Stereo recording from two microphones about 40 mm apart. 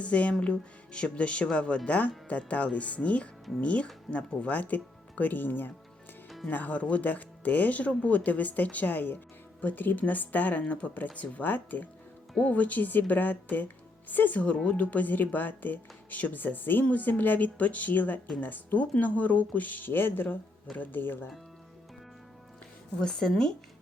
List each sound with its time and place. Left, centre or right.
0.0 s a woman's voice: left
6.5 s a woman's voice: left
23.0 s speech: centre